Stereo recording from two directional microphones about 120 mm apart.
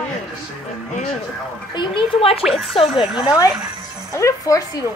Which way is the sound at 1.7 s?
40° left (ahead or behind).